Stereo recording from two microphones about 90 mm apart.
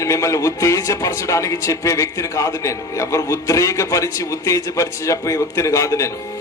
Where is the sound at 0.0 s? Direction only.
35° left (ahead or behind).